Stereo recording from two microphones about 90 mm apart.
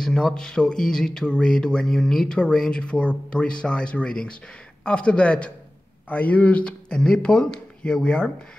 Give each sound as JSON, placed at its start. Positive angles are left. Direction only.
{"t": 0.0, "sound": "speech", "side_deg": 5}